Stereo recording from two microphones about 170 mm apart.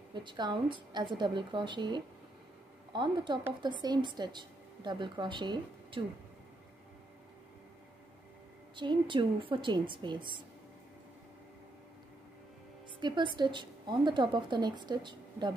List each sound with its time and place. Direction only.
0.1 s a woman's voice: 25° right (ahead or behind)
8.7 s a woman's voice: 30° right (ahead or behind)
13.0 s a woman's voice: 25° right (ahead or behind)